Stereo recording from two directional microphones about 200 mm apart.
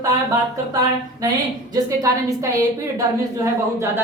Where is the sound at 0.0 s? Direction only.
15° right (ahead or behind).